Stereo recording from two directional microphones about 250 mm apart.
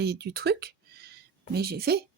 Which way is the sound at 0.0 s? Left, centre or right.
Right.